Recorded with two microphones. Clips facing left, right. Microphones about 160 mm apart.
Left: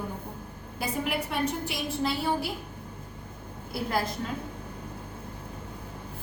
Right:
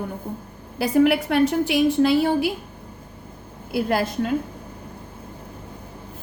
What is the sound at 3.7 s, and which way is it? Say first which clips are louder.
Speech: right 8 dB; 85° right.